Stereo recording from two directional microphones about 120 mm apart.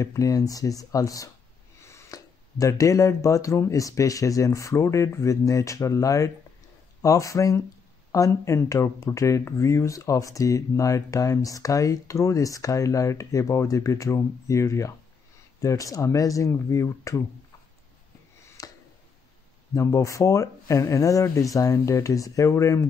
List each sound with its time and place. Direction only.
0.0 s speech: 25° left (ahead or behind)
18.6 s a sound: 30° left (ahead or behind)
19.7 s speech: 25° left (ahead or behind)